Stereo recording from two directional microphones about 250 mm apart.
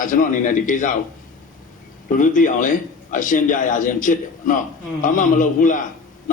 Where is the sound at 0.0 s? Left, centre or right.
Left.